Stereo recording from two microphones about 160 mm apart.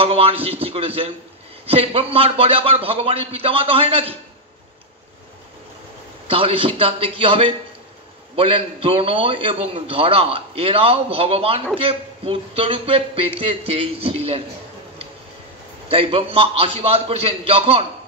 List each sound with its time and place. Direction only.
0.0 s a man's voice: 35° right (ahead or behind)
6.2 s a man's voice: 35° right (ahead or behind)
15.9 s a man's voice: 35° right (ahead or behind)